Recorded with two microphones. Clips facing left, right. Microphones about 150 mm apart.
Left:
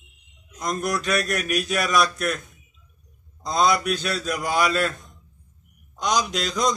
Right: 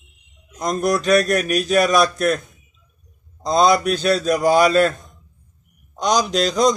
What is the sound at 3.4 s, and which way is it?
A man's voice, 35° right (ahead or behind).